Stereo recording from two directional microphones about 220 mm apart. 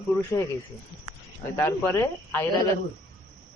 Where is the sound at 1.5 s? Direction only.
10° left (ahead or behind).